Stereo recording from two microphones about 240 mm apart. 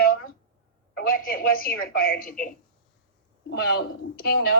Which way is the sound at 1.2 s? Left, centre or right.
Left.